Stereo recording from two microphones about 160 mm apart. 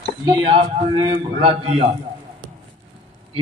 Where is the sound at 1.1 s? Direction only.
40° right (ahead or behind).